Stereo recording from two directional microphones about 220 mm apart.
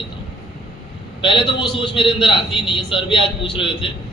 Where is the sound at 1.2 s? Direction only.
20° left (ahead or behind).